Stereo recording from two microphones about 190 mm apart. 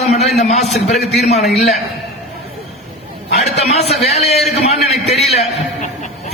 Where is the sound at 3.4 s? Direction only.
35° left (ahead or behind).